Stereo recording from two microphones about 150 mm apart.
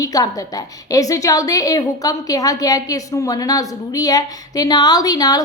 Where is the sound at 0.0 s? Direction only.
25° left (ahead or behind).